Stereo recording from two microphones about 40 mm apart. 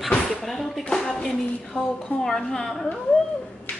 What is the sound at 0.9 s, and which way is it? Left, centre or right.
Speech, left.